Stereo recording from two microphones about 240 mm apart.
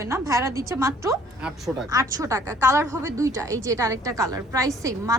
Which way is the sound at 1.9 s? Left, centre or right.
Centre.